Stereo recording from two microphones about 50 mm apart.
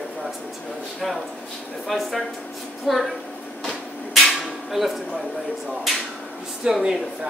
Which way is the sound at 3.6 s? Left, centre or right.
Centre.